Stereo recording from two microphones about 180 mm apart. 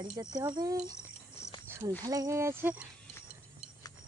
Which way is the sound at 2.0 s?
20° right (ahead or behind).